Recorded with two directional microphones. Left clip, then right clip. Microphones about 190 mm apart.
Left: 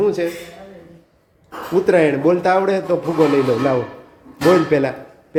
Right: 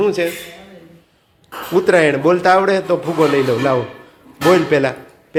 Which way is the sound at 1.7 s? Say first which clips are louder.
Right 2 dB; 5° right (ahead or behind).